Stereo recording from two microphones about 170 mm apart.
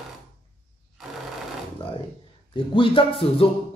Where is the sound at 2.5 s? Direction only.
30° left (ahead or behind).